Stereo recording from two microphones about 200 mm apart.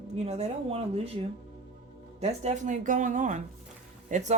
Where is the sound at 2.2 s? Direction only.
35° right (ahead or behind).